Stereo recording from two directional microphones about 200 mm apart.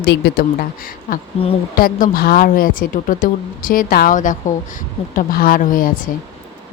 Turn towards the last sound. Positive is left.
turn(degrees=45)  # may be behind; listen again after turning